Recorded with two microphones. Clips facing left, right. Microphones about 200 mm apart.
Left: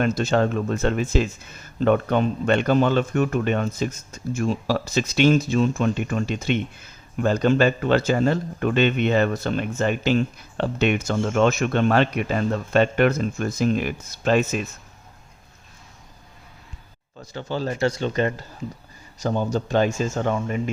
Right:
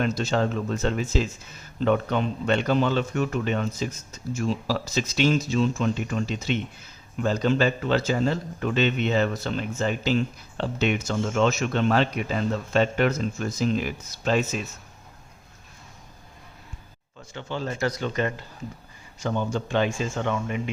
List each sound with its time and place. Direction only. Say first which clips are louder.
0.0 s speech: left 4 dB; 55° left (ahead or behind)
17.2 s speech: left 4 dB; 40° left (ahead or behind)